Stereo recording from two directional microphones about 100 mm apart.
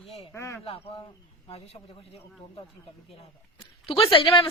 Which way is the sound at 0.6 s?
65° left (ahead or behind).